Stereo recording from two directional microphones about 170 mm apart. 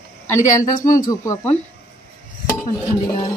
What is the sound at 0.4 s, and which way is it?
Speech, 50° left (ahead or behind).